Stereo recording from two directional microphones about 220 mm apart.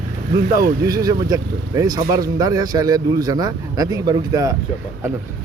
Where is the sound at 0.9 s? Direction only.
15° right (ahead or behind).